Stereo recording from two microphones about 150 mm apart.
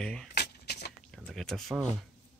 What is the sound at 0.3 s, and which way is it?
Shuffling cards, 90° left.